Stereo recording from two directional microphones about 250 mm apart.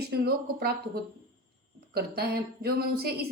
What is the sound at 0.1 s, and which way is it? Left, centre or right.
Speech, right.